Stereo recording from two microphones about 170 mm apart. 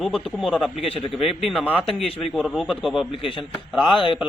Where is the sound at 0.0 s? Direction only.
5° right (ahead or behind).